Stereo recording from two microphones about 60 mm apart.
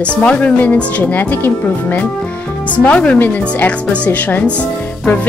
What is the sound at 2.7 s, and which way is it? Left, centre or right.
Speech, left.